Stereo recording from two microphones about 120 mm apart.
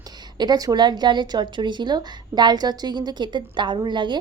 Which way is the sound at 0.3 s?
35° right (ahead or behind).